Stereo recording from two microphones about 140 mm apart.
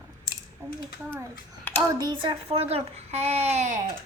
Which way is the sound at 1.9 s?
30° right (ahead or behind).